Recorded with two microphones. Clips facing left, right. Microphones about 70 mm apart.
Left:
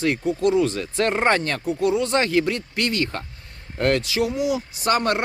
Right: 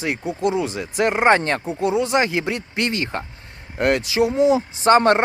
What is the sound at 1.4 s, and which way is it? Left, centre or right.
Speech, right.